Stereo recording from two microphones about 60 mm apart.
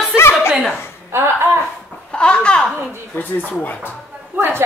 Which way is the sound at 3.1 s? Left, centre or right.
Left.